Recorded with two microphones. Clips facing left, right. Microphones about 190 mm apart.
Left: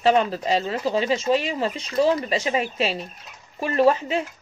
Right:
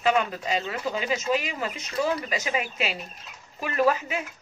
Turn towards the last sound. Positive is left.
turn(degrees=30)  # may be behind; listen again after turning